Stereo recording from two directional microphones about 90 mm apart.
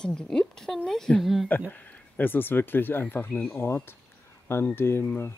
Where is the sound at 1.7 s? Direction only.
20° left (ahead or behind).